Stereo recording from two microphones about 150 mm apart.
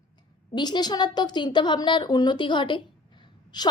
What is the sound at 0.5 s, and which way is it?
A woman's voice, 30° left (ahead or behind).